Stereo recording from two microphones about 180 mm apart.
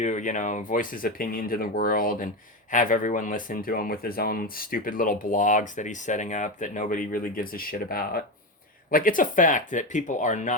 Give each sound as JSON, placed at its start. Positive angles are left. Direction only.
{"t": 0.0, "sound": "speech", "side_deg": 45}